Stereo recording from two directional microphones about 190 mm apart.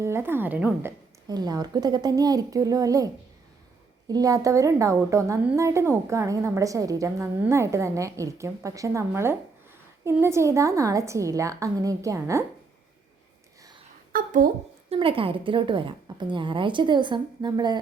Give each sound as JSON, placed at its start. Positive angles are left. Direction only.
{"t": 0.0, "sound": "a woman's voice", "side_deg": -15}
{"t": 4.1, "sound": "a woman's voice", "side_deg": -20}
{"t": 14.1, "sound": "a sound", "side_deg": -45}
{"t": 14.8, "sound": "a woman's voice", "side_deg": -30}